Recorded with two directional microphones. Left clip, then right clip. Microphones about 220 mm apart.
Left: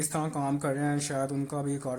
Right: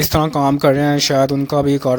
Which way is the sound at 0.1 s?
35° right (ahead or behind).